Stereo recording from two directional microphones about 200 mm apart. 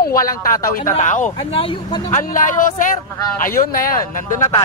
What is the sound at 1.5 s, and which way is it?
Speech, 25° left (ahead or behind).